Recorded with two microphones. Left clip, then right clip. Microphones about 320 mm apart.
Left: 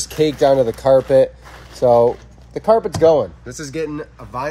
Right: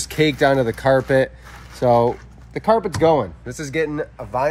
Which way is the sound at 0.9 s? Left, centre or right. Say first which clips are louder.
Left 5 dB; right.